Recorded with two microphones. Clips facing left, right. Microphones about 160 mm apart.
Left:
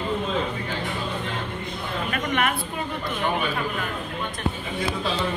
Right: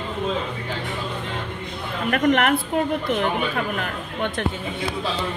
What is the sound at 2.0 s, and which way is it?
Speech, 60° right (ahead or behind).